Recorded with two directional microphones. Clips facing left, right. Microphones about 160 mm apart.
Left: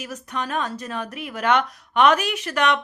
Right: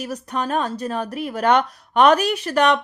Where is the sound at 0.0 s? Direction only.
35° right (ahead or behind).